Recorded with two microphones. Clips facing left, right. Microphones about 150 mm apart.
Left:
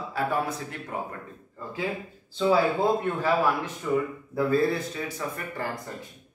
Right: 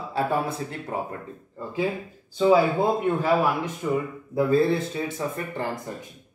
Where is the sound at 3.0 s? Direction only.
15° right (ahead or behind).